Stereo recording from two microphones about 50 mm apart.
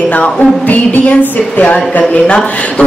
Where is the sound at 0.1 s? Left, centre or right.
Left.